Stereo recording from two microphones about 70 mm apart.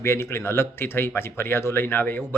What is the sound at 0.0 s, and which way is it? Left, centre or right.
Speech, left.